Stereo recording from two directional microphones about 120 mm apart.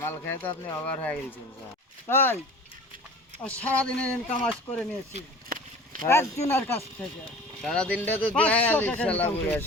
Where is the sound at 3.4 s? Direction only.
10° left (ahead or behind).